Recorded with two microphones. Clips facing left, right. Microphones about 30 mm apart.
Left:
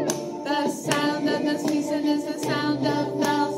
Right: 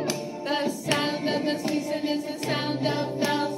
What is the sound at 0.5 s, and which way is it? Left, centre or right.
Music, right.